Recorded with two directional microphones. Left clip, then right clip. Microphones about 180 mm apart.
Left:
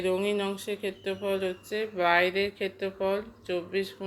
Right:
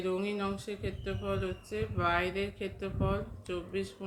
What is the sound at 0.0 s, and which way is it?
Speech, 20° left (ahead or behind).